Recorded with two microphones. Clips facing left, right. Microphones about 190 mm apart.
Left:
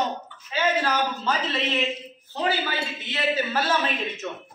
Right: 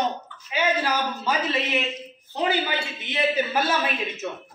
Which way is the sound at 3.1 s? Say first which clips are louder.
Right 2 dB; 15° right (ahead or behind).